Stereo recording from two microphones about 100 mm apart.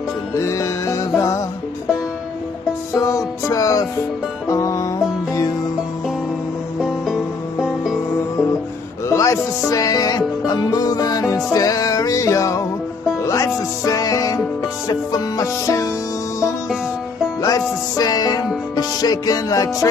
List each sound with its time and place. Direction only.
0.3 s music: 30° left (ahead or behind)
2.9 s music: 35° left (ahead or behind)
7.6 s music: 5° right (ahead or behind)
9.1 s music: 30° left (ahead or behind)
17.4 s music: 35° left (ahead or behind)